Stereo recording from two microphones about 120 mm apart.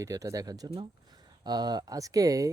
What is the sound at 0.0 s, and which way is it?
Speech, 30° right (ahead or behind).